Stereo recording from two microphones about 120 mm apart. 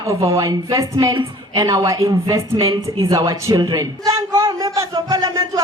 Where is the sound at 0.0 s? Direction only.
25° right (ahead or behind).